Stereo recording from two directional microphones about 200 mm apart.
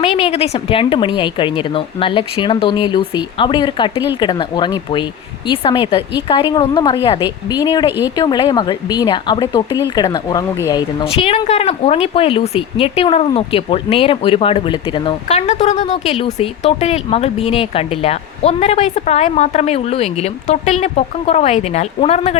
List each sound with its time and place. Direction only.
0.0 s speech: 30° left (ahead or behind)